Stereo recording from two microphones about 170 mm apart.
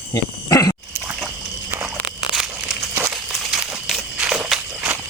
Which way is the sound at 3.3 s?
Centre (ahead or behind).